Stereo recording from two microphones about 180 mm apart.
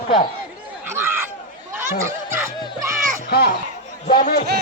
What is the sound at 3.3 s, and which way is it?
A man's voice, 60° left (ahead or behind).